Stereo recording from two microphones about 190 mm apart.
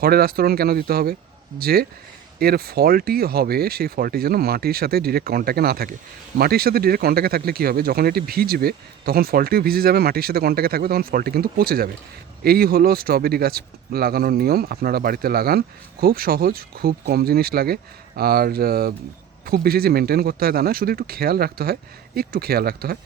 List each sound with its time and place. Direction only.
0.0 s speech: 55° right (ahead or behind)